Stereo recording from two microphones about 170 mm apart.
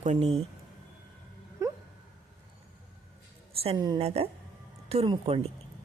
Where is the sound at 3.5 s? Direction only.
35° right (ahead or behind).